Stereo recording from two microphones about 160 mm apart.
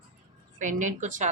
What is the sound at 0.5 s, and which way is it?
Speech, 50° right (ahead or behind).